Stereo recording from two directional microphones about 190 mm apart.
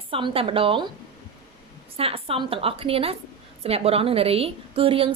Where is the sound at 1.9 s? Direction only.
30° right (ahead or behind).